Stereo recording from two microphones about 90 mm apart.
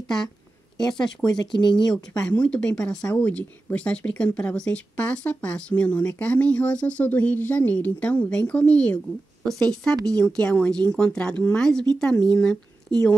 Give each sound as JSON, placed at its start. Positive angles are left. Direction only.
{"t": 0.7, "sound": "speech", "side_deg": 50}
{"t": 2.1, "sound": "speech", "side_deg": 10}